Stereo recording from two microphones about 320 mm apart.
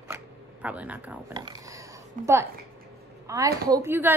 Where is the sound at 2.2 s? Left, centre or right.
Right.